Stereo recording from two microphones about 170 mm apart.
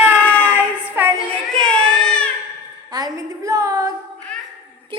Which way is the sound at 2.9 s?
20° right (ahead or behind).